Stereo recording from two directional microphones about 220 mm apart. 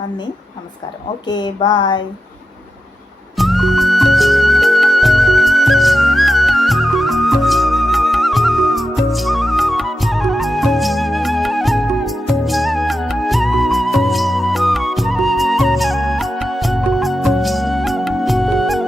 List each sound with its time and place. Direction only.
1.3 s speech: 20° left (ahead or behind)
3.3 s music: centre (ahead or behind)